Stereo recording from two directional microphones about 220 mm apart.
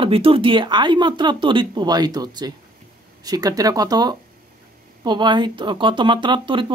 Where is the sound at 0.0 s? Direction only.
25° right (ahead or behind).